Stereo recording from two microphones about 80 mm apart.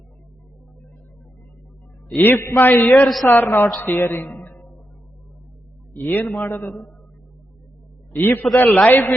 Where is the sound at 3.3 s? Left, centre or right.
Left.